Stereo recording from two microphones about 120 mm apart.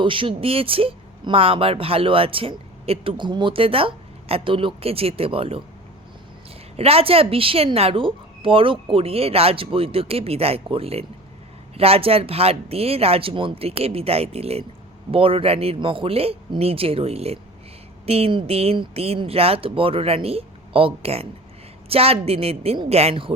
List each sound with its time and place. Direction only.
0.0 s speech: 45° right (ahead or behind)
6.7 s speech: 55° right (ahead or behind)